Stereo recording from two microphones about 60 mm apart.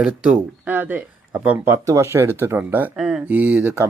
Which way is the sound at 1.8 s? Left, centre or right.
Right.